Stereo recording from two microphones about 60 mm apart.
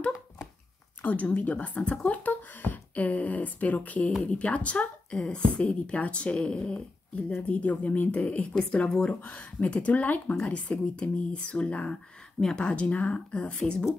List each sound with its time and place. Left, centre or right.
1.0 s speech: left
8.5 s a woman's voice: centre
11.9 s a woman's voice: centre